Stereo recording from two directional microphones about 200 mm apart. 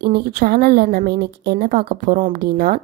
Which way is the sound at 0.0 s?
55° right (ahead or behind).